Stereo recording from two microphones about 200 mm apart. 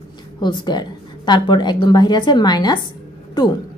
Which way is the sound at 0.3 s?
20° left (ahead or behind).